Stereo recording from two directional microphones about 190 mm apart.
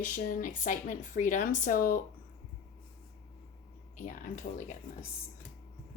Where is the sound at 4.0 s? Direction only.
40° left (ahead or behind).